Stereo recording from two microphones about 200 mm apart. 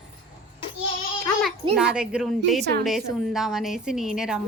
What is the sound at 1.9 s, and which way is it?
A woman's voice, 5° right (ahead or behind).